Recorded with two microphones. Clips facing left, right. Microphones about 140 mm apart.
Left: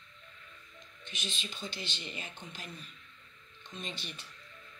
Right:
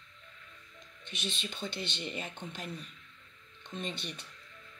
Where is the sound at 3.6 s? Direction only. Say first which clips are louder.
Right 4 dB; 60° right (ahead or behind).